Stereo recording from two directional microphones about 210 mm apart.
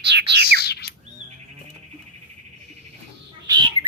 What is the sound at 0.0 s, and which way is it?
Bird, 55° right (ahead or behind).